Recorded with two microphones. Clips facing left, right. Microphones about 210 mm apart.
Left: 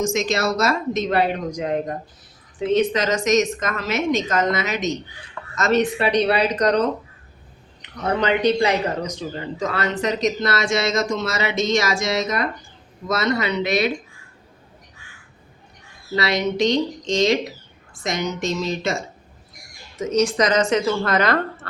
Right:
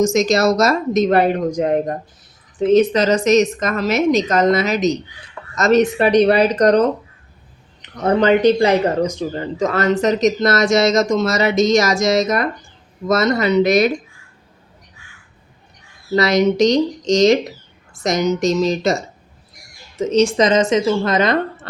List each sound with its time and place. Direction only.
0.0 s speech: 40° right (ahead or behind)
8.0 s speech: 45° right (ahead or behind)
16.1 s speech: 45° right (ahead or behind); by 21.7 s 20° right (ahead or behind)